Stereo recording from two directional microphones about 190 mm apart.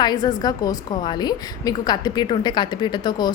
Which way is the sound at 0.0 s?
20° left (ahead or behind).